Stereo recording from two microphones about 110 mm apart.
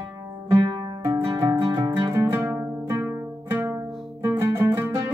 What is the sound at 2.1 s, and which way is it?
Music, 25° right (ahead or behind).